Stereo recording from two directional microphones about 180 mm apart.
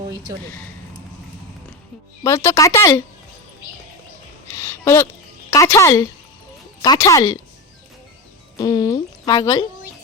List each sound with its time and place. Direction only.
0.1 s speech: 20° right (ahead or behind)
2.2 s a woman's voice: 15° left (ahead or behind)
4.5 s a sound: 15° left (ahead or behind)
5.5 s a woman's voice: 15° left (ahead or behind)
8.5 s speech: 20° left (ahead or behind)